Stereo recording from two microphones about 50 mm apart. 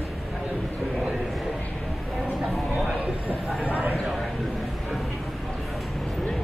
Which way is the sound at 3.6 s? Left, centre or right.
Right.